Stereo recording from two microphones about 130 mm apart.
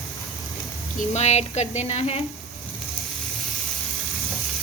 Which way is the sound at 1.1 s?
60° left (ahead or behind).